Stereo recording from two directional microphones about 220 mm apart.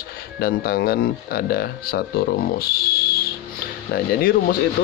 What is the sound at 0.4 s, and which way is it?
Speech, 45° left (ahead or behind).